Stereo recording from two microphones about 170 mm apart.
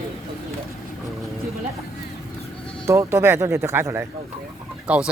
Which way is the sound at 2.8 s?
15° right (ahead or behind).